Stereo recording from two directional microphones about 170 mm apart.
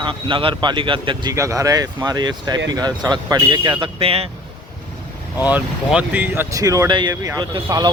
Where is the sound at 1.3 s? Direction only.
20° right (ahead or behind); by 4.2 s 35° right (ahead or behind).